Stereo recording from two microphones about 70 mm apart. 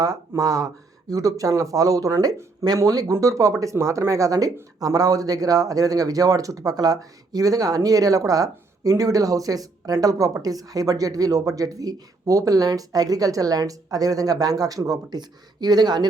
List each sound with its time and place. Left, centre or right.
0.0 s speech: right